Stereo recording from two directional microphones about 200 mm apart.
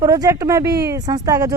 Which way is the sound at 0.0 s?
15° right (ahead or behind).